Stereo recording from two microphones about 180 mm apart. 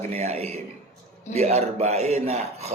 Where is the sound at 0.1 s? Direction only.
35° right (ahead or behind).